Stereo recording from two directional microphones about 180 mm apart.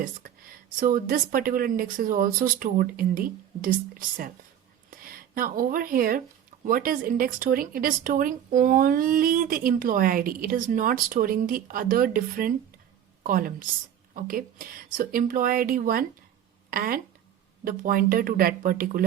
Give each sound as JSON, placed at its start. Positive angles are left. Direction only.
{"t": 0.8, "sound": "speech", "side_deg": -50}